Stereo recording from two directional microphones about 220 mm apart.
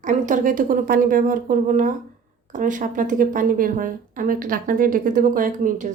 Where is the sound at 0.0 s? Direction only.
35° right (ahead or behind).